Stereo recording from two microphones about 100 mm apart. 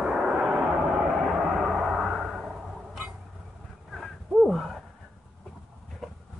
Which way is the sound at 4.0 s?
Centre (ahead or behind).